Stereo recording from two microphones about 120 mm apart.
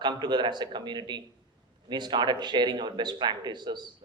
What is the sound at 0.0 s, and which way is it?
Speech, 35° right (ahead or behind).